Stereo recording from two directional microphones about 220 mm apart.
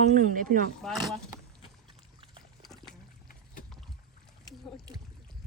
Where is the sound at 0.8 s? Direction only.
Centre (ahead or behind).